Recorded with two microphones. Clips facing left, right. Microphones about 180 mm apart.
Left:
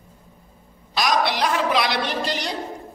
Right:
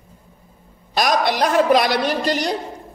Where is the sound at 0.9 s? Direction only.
50° right (ahead or behind).